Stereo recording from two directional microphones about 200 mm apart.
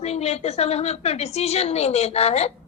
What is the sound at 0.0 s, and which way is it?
A woman's voice, 30° left (ahead or behind).